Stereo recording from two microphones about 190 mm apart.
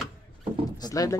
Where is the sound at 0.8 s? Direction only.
20° left (ahead or behind).